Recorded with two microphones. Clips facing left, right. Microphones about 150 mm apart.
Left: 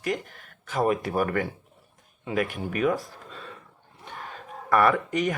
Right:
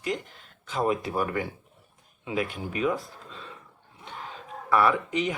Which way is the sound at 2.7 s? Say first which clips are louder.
Left 2 dB; 55° left (ahead or behind).